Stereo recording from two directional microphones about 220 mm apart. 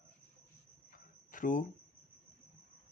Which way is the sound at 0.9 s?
35° left (ahead or behind).